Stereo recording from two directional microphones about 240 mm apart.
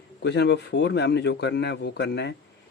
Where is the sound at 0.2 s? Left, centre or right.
Left.